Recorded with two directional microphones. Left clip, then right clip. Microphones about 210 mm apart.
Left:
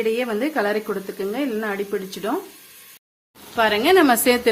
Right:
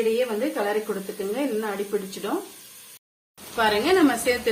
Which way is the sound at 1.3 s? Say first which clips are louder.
Left 1 dB; 45° left (ahead or behind).